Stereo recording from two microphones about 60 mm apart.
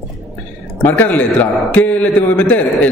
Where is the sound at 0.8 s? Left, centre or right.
Left.